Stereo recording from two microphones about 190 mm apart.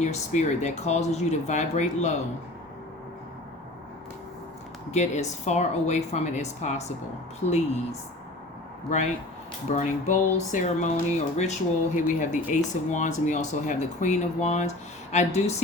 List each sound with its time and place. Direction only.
0.0 s speech: 35° left (ahead or behind)
4.9 s speech: 35° left (ahead or behind)
9.6 s speech: 40° left (ahead or behind)